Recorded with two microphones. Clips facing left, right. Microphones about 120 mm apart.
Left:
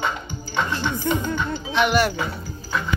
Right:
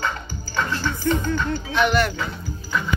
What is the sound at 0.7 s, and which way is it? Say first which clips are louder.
Speech: right 2 dB; 15° left (ahead or behind).